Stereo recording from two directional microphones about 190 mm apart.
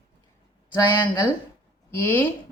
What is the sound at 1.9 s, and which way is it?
Speech, 10° left (ahead or behind).